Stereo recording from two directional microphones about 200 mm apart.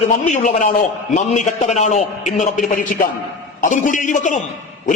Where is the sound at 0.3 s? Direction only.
40° left (ahead or behind).